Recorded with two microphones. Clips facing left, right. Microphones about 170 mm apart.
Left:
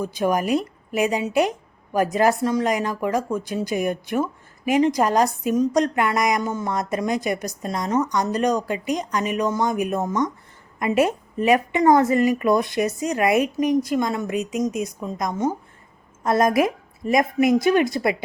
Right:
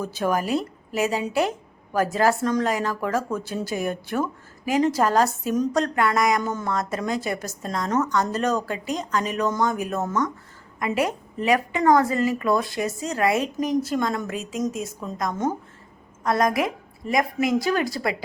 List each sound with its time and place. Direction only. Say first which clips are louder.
0.0 s a woman's voice: left 2 dB; 15° left (ahead or behind)